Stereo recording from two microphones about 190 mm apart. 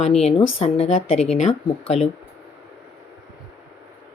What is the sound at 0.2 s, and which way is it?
Speech, 35° left (ahead or behind).